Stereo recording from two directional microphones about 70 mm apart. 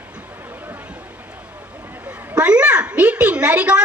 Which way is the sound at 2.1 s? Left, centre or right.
Centre.